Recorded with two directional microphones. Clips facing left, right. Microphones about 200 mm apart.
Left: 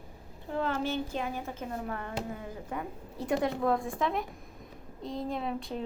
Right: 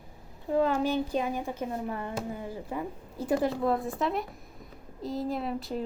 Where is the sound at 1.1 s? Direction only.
15° right (ahead or behind).